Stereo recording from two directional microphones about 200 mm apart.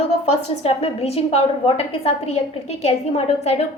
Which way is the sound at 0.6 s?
30° left (ahead or behind).